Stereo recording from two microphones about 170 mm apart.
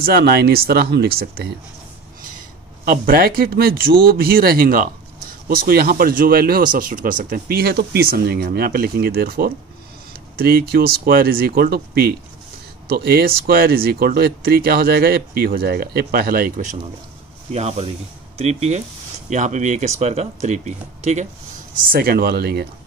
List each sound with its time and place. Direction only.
0.0 s speech: 70° right (ahead or behind)
2.2 s speech: 55° right (ahead or behind)
17.5 s speech: 40° right (ahead or behind)
21.9 s speech: 65° right (ahead or behind)